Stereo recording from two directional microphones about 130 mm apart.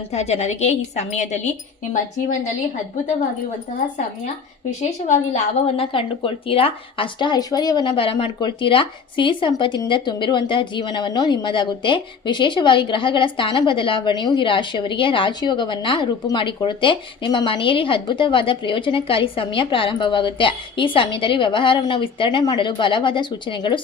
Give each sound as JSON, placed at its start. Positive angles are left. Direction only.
{"t": 0.1, "sound": "a woman's voice", "side_deg": 55}
{"t": 4.8, "sound": "a woman's voice", "side_deg": 65}
{"t": 5.7, "sound": "speech", "side_deg": 45}